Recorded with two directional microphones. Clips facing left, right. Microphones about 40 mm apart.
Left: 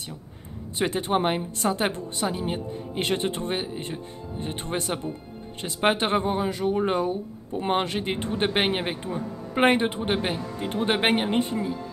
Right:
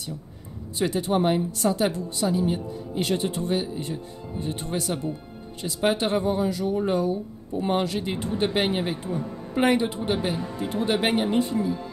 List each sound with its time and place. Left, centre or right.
0.7 s speech: left